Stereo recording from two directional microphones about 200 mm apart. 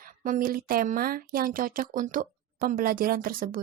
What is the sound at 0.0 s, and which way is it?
Speech, 45° right (ahead or behind).